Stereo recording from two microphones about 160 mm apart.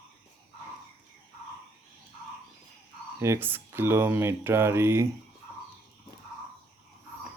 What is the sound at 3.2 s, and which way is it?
Speech, 15° right (ahead or behind).